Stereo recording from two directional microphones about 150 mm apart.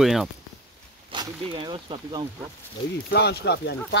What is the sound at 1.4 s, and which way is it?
Speech, 30° right (ahead or behind).